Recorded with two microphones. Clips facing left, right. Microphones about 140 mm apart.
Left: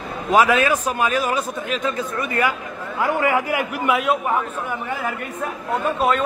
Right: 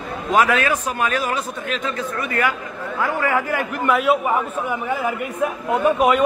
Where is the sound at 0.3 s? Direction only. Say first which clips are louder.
Left 1 dB; 10° left (ahead or behind).